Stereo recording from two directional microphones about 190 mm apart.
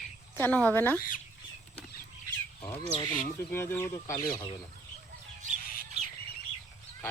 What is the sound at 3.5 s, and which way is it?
Speech, 10° left (ahead or behind).